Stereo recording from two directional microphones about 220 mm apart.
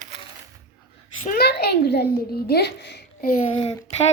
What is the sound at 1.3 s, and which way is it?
A child's voice, 45° left (ahead or behind).